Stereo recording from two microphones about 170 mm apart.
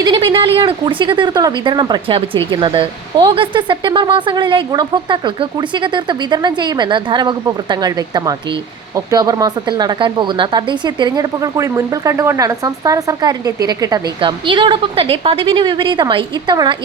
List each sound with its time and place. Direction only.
0.0 s speech: 30° right (ahead or behind)